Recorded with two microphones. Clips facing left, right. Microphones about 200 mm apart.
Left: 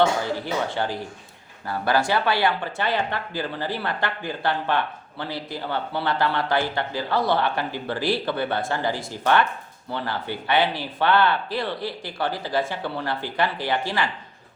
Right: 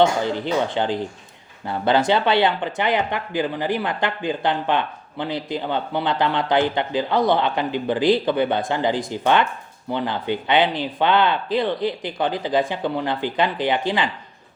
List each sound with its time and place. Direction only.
0.0 s speech: 20° right (ahead or behind)